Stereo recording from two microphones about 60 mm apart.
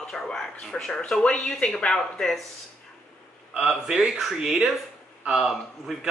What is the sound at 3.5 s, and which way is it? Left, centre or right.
A man's voice, centre.